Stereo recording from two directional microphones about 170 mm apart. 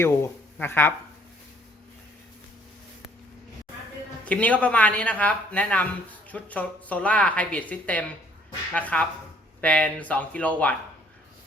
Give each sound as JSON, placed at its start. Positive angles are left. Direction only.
{"t": 0.0, "sound": "speech", "side_deg": 15}
{"t": 4.3, "sound": "speech", "side_deg": 10}